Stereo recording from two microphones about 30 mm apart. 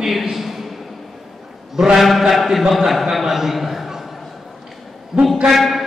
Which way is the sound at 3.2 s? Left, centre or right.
Centre.